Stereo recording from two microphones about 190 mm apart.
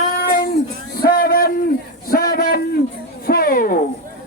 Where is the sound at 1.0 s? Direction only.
50° left (ahead or behind).